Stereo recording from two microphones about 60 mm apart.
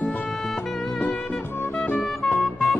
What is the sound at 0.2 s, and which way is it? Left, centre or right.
Music, centre.